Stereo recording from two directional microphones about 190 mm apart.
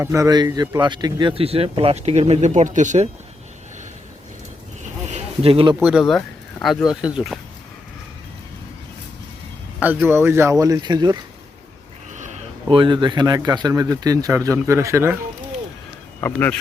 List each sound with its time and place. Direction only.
0.0 s speech: 15° right (ahead or behind); by 3.1 s 40° right (ahead or behind)
5.0 s a sound: 35° right (ahead or behind)
5.8 s speech: centre (ahead or behind)
9.8 s speech: 10° right (ahead or behind)
12.1 s a sound: 40° right (ahead or behind)
12.6 s speech: 25° right (ahead or behind)
16.2 s speech: 10° left (ahead or behind)